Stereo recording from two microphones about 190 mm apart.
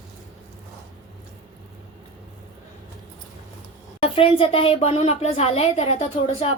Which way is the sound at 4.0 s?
30° left (ahead or behind).